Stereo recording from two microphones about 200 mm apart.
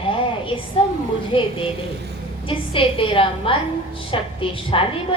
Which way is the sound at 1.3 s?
25° left (ahead or behind).